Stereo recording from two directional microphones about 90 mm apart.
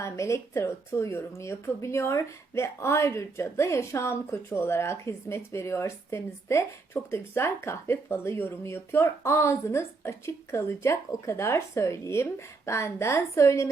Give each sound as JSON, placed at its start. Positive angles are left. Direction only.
{"t": 0.0, "sound": "a woman's voice", "side_deg": 35}